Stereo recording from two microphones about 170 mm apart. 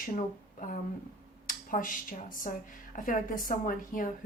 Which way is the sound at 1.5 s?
50° left (ahead or behind).